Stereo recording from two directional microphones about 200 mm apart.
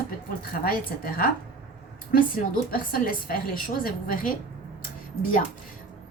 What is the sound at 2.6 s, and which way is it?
A woman's voice, 45° left (ahead or behind).